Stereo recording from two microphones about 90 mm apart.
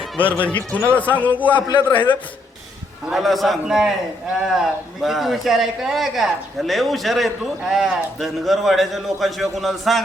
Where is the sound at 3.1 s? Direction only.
Centre (ahead or behind).